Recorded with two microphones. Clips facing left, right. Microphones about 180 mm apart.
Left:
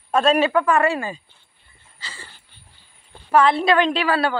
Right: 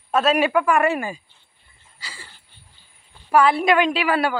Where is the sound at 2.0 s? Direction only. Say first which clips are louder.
Left 1 dB; 10° right (ahead or behind).